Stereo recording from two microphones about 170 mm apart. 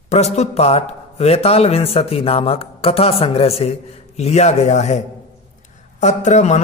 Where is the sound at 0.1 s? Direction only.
40° left (ahead or behind).